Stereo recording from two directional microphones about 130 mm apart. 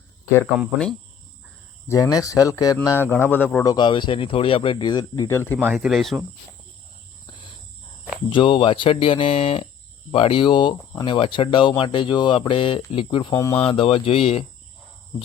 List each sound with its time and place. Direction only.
1.9 s speech: 30° left (ahead or behind)
3.6 s speech: 30° left (ahead or behind)
5.7 s speech: centre (ahead or behind)
7.3 s cricket: 35° left (ahead or behind)
8.3 s speech: 40° left (ahead or behind)